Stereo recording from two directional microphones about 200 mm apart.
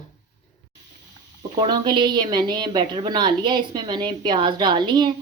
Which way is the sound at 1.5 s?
20° right (ahead or behind).